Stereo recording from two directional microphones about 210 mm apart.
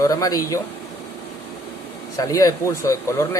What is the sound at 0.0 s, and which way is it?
Speech, 15° left (ahead or behind).